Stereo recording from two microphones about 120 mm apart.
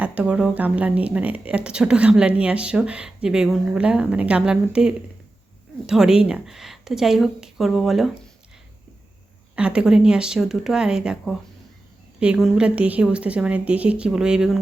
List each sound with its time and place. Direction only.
0.0 s speech: 10° right (ahead or behind)
9.6 s speech: 10° right (ahead or behind)